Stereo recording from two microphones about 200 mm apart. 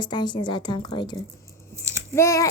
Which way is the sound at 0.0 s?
20° left (ahead or behind).